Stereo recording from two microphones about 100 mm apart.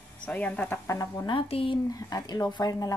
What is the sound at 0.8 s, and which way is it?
Speech, 30° left (ahead or behind).